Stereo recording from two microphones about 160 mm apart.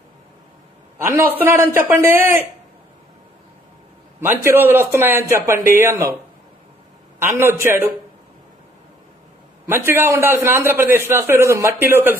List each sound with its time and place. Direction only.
0.9 s a man's voice: 15° right (ahead or behind)
4.2 s a man's voice: 15° right (ahead or behind)
7.2 s a man's voice: 15° right (ahead or behind)
9.7 s a man's voice: 15° right (ahead or behind)